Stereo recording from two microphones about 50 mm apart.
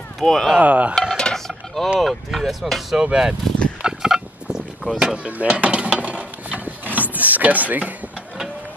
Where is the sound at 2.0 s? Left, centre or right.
Centre.